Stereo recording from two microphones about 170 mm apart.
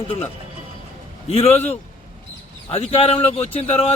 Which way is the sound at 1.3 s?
40° left (ahead or behind).